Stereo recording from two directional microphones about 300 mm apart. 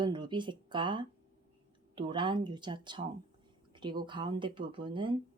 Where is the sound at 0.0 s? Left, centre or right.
Centre.